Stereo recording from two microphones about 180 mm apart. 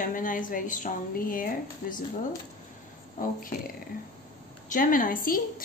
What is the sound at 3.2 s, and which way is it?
Speech, 50° left (ahead or behind).